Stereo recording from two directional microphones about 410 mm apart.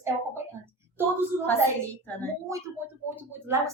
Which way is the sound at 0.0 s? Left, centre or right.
Centre.